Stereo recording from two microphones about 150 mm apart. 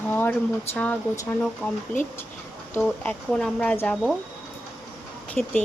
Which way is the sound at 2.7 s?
15° left (ahead or behind).